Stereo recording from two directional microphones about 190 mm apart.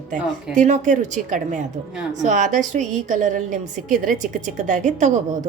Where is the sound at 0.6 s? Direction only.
40° right (ahead or behind).